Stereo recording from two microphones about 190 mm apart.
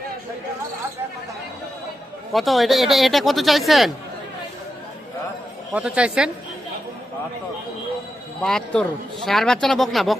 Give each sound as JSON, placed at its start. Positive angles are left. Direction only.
{"t": 2.3, "sound": "a man's voice", "side_deg": 0}
{"t": 5.7, "sound": "a man's voice", "side_deg": -5}
{"t": 8.4, "sound": "a man's voice", "side_deg": 5}